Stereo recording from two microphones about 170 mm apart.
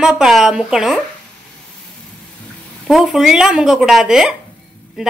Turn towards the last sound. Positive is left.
turn(degrees=-5)  # may be behind; listen again after turning